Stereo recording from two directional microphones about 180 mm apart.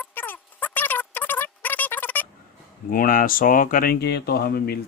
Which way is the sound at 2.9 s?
50° left (ahead or behind).